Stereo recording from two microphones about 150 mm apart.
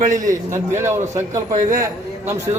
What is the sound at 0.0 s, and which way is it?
Speech, 60° right (ahead or behind).